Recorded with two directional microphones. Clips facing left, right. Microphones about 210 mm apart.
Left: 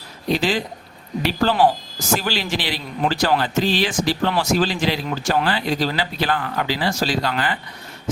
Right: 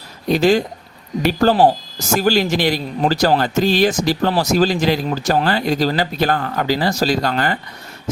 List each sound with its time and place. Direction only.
0.3 s speech: 45° right (ahead or behind)